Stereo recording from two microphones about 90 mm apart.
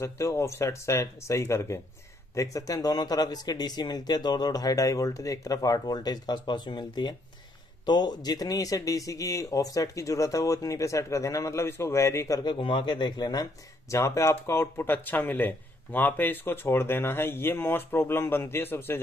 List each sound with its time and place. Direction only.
0.0 s speech: 30° left (ahead or behind)
12.4 s speech: 65° left (ahead or behind); by 13.9 s 45° left (ahead or behind)
13.9 s speech: 35° left (ahead or behind)